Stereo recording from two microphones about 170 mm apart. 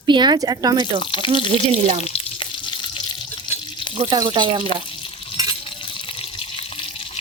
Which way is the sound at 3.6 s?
30° left (ahead or behind).